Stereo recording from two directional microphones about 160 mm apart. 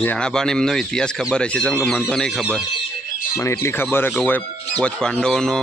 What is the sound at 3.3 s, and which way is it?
Speech, 15° left (ahead or behind).